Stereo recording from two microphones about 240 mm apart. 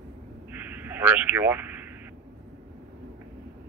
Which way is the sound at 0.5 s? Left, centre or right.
Centre.